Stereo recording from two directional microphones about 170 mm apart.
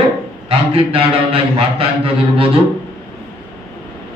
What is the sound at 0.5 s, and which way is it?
A man's voice, 30° right (ahead or behind).